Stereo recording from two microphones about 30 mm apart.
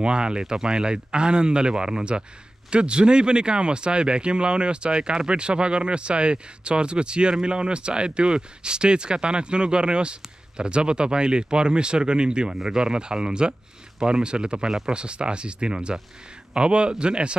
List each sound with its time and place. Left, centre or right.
0.0 s speech: right